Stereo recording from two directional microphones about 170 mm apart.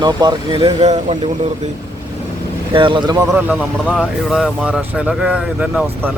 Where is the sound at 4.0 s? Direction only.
5° right (ahead or behind).